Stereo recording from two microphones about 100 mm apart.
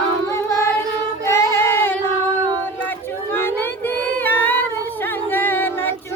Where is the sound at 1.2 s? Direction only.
30° left (ahead or behind).